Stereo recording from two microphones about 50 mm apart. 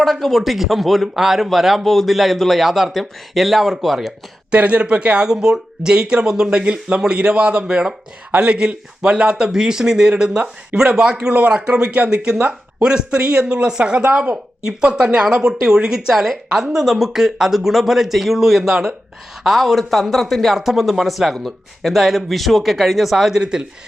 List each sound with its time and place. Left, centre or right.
0.0 s a man's voice: centre
4.5 s a man's voice: right